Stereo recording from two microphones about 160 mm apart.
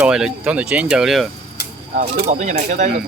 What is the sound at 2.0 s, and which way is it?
Speech, 50° right (ahead or behind).